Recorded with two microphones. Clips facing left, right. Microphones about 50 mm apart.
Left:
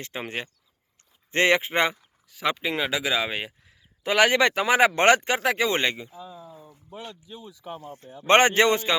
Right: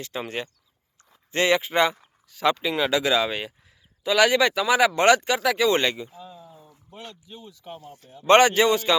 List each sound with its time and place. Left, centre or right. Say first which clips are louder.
0.1 s speech: right 2 dB; left
1.3 s speech: even; left
2.3 s speech: right 3 dB; centre
4.0 s speech: right 1 dB; left
6.5 s a sound: left 4 dB; centre
7.5 s speech: left 3 dB; centre
7.8 s speech: left 3 dB; left